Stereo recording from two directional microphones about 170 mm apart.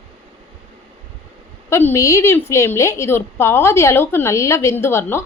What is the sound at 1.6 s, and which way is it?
A woman's voice, 15° left (ahead or behind).